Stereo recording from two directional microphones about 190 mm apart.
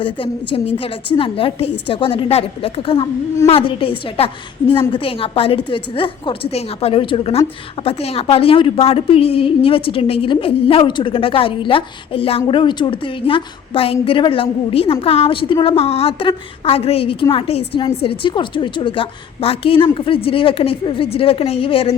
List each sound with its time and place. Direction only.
0.0 s a woman's voice: 30° left (ahead or behind)